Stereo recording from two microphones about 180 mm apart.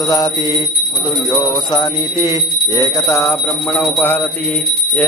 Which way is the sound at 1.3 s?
25° left (ahead or behind).